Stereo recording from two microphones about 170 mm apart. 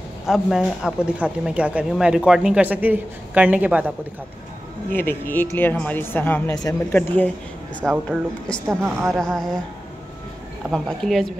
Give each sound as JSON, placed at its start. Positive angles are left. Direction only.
{"t": 0.3, "sound": "speech", "side_deg": -5}
{"t": 4.9, "sound": "a woman's voice", "side_deg": 10}
{"t": 8.6, "sound": "speech", "side_deg": -15}
{"t": 9.1, "sound": "a woman's voice", "side_deg": 5}
{"t": 10.7, "sound": "a woman's voice", "side_deg": 0}